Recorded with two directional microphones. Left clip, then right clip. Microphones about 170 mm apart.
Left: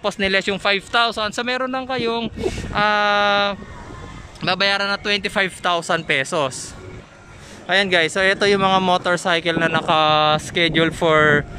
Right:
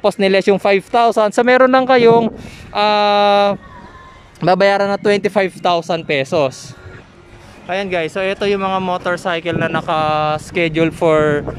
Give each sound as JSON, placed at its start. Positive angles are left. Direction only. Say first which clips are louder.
{"t": 0.0, "sound": "speech", "louder": "right 6 dB", "side_deg": -25}
{"t": 2.2, "sound": "speech", "louder": "even", "side_deg": -25}
{"t": 4.4, "sound": "speech", "louder": "right 7 dB", "side_deg": -40}
{"t": 7.6, "sound": "speech", "louder": "left 2 dB", "side_deg": -5}